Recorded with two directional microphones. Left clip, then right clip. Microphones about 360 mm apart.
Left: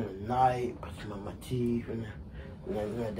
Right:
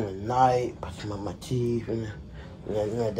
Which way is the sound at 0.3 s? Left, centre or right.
Right.